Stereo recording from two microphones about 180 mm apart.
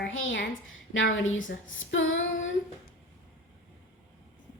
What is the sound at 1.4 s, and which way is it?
Female singing, 90° left.